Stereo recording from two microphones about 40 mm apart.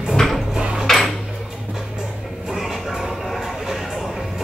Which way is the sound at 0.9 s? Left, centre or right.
Centre.